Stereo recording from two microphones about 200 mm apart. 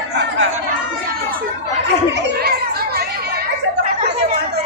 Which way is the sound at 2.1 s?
55° right (ahead or behind).